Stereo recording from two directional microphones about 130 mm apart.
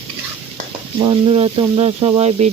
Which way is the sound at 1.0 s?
40° right (ahead or behind).